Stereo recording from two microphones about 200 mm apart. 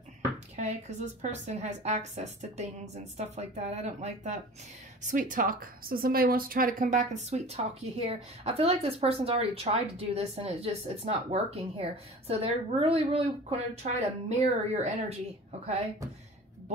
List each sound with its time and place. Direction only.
0.6 s speech: 35° right (ahead or behind)